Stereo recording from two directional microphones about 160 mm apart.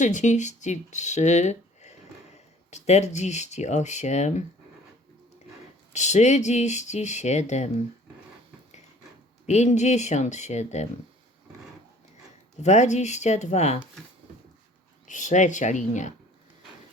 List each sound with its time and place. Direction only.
0.0 s speech: 50° left (ahead or behind)
5.9 s speech: 45° left (ahead or behind)
9.5 s speech: 45° left (ahead or behind)
12.6 s speech: 45° left (ahead or behind)
15.0 s speech: 50° left (ahead or behind)